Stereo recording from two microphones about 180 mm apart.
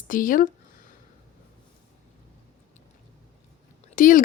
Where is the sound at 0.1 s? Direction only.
50° left (ahead or behind).